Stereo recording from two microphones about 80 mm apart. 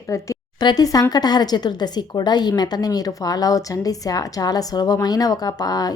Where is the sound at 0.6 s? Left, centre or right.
Left.